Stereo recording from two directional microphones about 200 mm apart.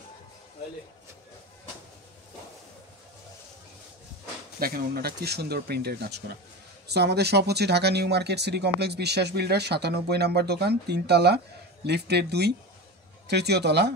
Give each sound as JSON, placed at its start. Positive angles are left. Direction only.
{"t": 4.6, "sound": "speech", "side_deg": -50}